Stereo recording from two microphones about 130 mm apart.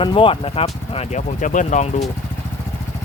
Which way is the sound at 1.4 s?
75° left (ahead or behind).